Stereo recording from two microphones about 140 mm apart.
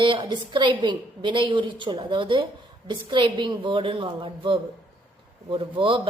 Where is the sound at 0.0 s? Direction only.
35° right (ahead or behind).